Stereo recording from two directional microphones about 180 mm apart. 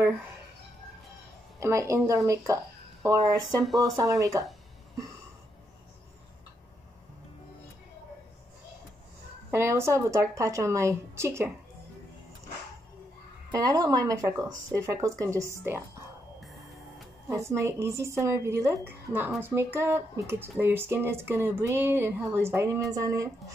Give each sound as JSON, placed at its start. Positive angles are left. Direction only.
{"t": 1.6, "sound": "a woman's voice", "side_deg": -15}
{"t": 3.6, "sound": "speech", "side_deg": 0}
{"t": 4.0, "sound": "speech", "side_deg": -20}
{"t": 9.5, "sound": "a woman's voice", "side_deg": -15}
{"t": 13.6, "sound": "a woman's voice", "side_deg": -20}
{"t": 17.3, "sound": "a woman's voice", "side_deg": -15}